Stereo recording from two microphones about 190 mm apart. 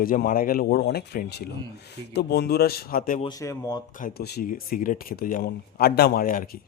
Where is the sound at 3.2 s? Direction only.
20° left (ahead or behind).